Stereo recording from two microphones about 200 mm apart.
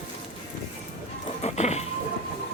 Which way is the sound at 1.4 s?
35° left (ahead or behind).